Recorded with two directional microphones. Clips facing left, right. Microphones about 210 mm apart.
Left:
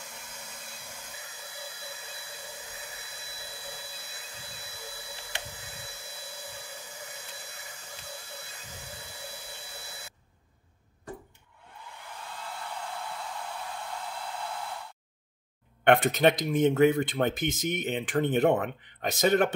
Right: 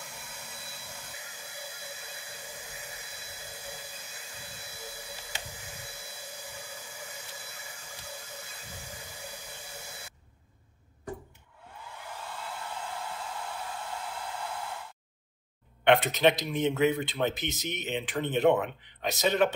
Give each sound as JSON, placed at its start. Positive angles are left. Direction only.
{"t": 15.8, "sound": "speech", "side_deg": 50}